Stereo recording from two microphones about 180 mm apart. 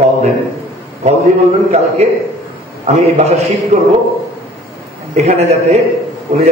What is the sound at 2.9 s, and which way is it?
Speech, 40° right (ahead or behind).